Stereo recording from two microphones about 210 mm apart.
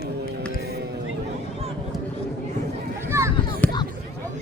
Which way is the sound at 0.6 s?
50° right (ahead or behind).